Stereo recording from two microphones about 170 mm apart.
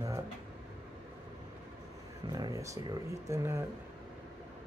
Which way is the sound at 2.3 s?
20° right (ahead or behind).